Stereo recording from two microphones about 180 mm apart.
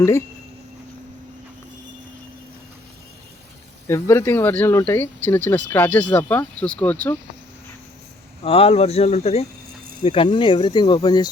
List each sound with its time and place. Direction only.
3.8 s speech: 15° left (ahead or behind)
8.4 s speech: 30° left (ahead or behind)